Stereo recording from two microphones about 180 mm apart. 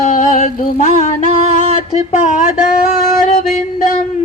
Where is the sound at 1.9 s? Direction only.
40° left (ahead or behind).